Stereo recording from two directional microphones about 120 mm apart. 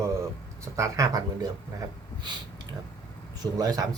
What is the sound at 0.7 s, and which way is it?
Speech, 30° right (ahead or behind).